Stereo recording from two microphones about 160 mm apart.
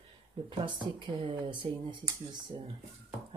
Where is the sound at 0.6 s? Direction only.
30° right (ahead or behind).